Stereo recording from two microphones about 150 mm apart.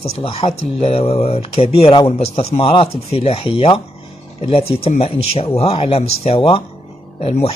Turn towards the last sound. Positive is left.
turn(degrees=40)  # may be behind; listen again after turning